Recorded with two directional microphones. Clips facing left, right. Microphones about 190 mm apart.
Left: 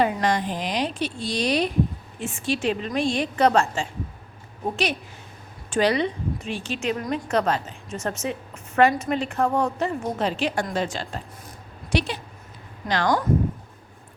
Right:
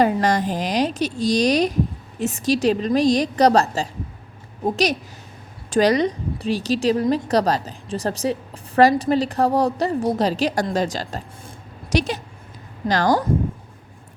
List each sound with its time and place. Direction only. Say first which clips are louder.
0.0 s a woman's voice: right 4 dB; 40° right (ahead or behind)